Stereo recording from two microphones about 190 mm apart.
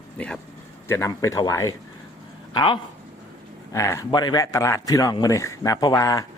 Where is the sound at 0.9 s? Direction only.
15° left (ahead or behind).